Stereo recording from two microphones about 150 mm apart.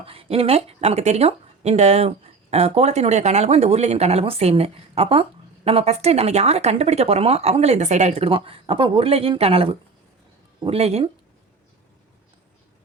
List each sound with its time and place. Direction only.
0.0 s speech: 40° right (ahead or behind)